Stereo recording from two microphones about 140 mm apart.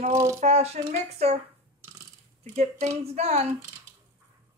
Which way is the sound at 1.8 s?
15° right (ahead or behind).